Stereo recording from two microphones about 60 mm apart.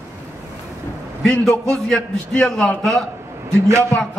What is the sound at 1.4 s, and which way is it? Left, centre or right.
A man's voice, centre.